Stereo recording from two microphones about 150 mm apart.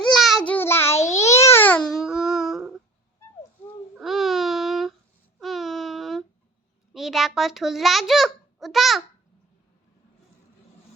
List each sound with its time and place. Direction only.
0.0 s child singing: centre (ahead or behind)
0.4 s child singing: 15° left (ahead or behind)
1.1 s babbling: 20° left (ahead or behind)
1.9 s music: centre (ahead or behind)
3.9 s babbling: centre (ahead or behind)
5.4 s a sound: centre (ahead or behind)
6.9 s a child's voice: centre (ahead or behind)